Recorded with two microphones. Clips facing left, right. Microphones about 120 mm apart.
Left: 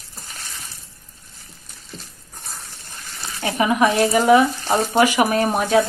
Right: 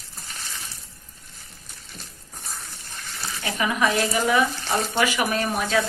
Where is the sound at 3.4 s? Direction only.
40° left (ahead or behind).